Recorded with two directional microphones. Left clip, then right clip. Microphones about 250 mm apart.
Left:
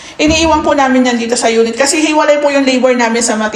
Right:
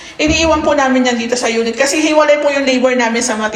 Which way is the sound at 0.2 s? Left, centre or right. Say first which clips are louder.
Left 2 dB; centre.